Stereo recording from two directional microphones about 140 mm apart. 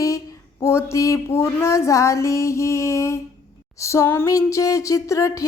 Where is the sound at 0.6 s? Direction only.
20° left (ahead or behind).